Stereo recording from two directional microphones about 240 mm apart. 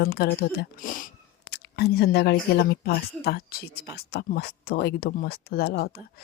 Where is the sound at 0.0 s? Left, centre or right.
Left.